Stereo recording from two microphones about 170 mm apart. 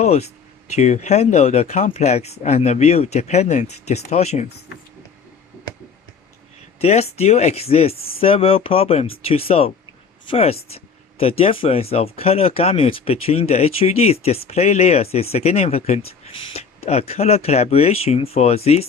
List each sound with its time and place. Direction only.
0.0 s speech: 40° left (ahead or behind)
6.8 s speech: 35° left (ahead or behind)